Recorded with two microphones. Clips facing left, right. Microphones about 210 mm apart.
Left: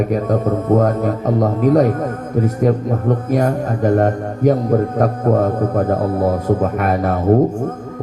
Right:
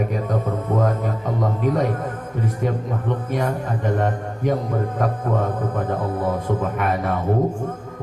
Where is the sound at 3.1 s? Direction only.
45° left (ahead or behind).